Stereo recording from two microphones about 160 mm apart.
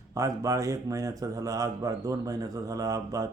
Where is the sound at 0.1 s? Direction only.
20° right (ahead or behind).